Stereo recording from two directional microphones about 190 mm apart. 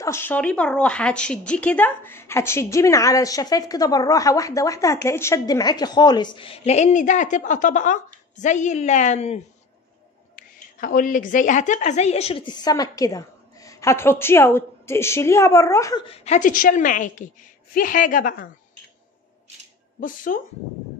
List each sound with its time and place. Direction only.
0.0 s speech: 10° left (ahead or behind); by 9.4 s 35° left (ahead or behind)
10.3 s a woman's voice: 50° left (ahead or behind); by 16.0 s 15° left (ahead or behind)
16.1 s a woman's voice: 40° left (ahead or behind)
20.0 s a woman's voice: 45° left (ahead or behind)